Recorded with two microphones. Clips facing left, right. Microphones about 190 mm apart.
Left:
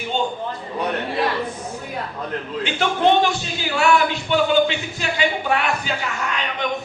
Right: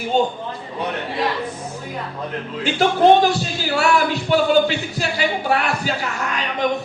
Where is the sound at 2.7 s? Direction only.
40° right (ahead or behind).